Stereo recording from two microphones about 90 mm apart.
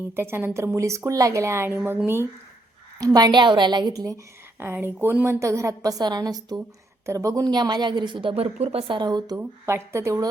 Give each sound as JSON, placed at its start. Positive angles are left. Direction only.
{"t": 0.2, "sound": "a woman's voice", "side_deg": -25}
{"t": 3.0, "sound": "a woman's voice", "side_deg": -45}
{"t": 4.6, "sound": "a woman's voice", "side_deg": -25}
{"t": 7.0, "sound": "a woman's voice", "side_deg": -35}
{"t": 9.4, "sound": "a woman's voice", "side_deg": -25}